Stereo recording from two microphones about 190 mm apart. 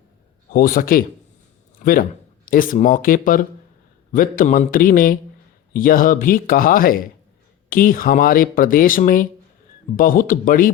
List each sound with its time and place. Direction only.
0.5 s speech: 50° left (ahead or behind)